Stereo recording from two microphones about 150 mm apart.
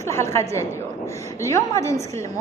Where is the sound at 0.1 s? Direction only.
20° left (ahead or behind).